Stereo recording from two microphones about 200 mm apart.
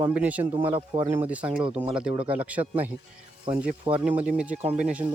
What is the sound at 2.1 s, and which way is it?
Speech, 25° right (ahead or behind).